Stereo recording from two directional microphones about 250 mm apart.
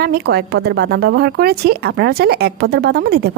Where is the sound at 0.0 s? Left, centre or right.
Right.